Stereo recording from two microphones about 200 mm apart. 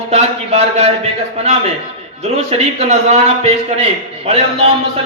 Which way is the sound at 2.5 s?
30° right (ahead or behind).